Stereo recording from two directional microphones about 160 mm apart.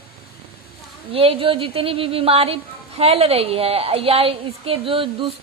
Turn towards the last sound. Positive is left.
turn(degrees=-35)  # may be behind; listen again after turning